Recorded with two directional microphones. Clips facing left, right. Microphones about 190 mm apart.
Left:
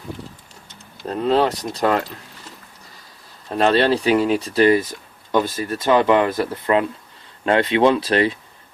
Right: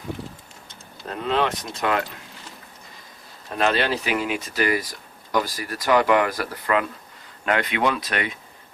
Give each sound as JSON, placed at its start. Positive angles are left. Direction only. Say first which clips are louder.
{"t": 1.0, "sound": "speech", "louder": "left 6 dB", "side_deg": 35}
{"t": 3.5, "sound": "speech", "louder": "left 6 dB", "side_deg": 30}